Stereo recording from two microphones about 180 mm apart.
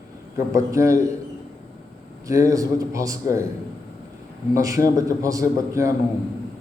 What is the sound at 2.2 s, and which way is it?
A man's voice, 15° right (ahead or behind).